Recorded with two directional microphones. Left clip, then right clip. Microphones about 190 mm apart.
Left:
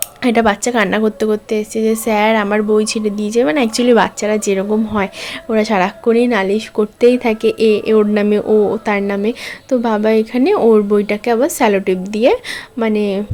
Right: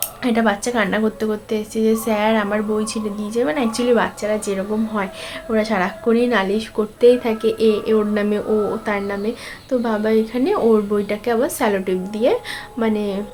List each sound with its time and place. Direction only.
0.2 s a woman's voice: 45° left (ahead or behind)